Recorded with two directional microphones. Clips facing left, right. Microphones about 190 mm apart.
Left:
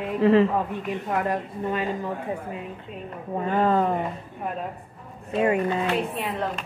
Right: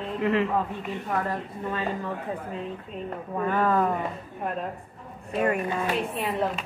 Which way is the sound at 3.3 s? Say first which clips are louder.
Left 2 dB; 25° left (ahead or behind).